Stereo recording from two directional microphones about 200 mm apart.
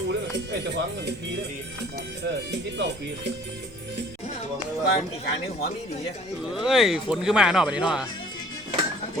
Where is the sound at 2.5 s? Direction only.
60° right (ahead or behind).